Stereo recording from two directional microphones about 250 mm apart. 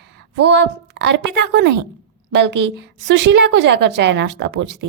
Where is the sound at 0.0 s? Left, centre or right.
Right.